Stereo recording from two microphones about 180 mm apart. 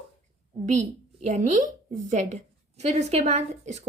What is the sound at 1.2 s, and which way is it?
Speech, 40° right (ahead or behind).